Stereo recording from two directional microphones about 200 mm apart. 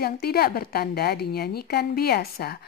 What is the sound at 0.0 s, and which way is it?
A woman's voice, 50° left (ahead or behind).